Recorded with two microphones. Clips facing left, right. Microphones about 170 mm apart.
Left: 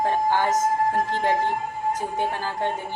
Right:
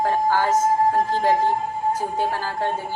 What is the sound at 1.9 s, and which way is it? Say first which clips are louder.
Speech: right 1 dB; 20° left (ahead or behind).